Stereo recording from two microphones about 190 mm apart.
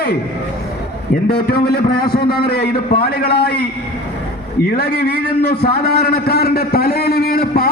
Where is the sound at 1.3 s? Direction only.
60° left (ahead or behind).